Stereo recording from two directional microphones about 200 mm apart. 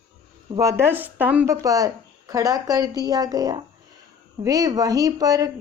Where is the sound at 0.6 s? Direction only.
15° right (ahead or behind).